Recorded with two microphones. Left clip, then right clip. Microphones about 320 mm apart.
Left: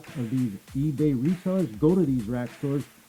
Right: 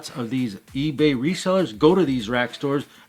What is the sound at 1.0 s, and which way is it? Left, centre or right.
Speech, centre.